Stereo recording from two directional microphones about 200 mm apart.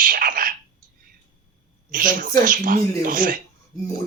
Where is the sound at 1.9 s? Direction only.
45° right (ahead or behind).